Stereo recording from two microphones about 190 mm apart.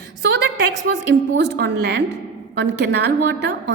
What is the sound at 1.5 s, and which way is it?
A woman's voice, 60° right (ahead or behind).